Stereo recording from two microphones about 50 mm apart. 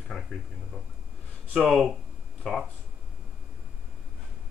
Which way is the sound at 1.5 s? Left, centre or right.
Centre.